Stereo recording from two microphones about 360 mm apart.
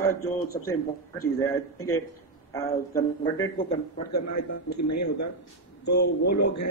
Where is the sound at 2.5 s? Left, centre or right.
Centre.